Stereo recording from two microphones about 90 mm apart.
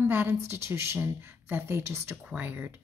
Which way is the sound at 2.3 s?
20° right (ahead or behind).